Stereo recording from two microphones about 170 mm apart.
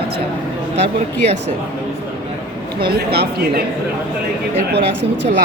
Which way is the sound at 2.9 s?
70° right (ahead or behind).